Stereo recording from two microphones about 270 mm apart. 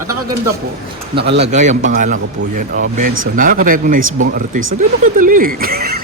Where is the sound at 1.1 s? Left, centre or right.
Right.